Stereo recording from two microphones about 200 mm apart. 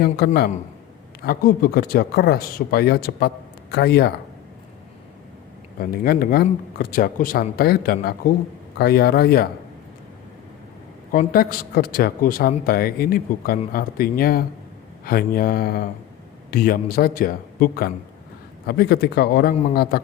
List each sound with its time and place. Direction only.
1.2 s speech: 50° left (ahead or behind)
5.8 s speech: 45° left (ahead or behind)
11.1 s speech: 45° left (ahead or behind)